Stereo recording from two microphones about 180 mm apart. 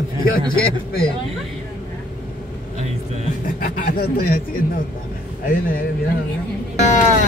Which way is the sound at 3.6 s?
50° left (ahead or behind).